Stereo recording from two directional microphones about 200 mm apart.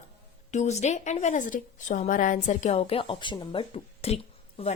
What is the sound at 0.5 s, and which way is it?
A woman's voice, 35° left (ahead or behind).